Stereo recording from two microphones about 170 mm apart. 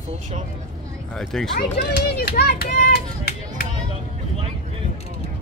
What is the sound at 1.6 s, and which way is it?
Speech, 70° left (ahead or behind).